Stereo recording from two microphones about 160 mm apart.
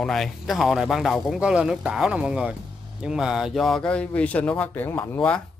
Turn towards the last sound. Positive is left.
turn(degrees=5)  # may be behind; listen again after turning